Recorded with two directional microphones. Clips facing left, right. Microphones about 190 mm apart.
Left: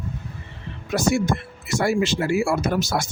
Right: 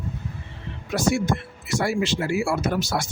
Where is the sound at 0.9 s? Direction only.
45° left (ahead or behind).